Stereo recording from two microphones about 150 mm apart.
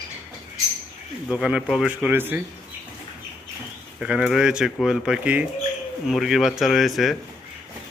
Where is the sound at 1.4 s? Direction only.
5° right (ahead or behind).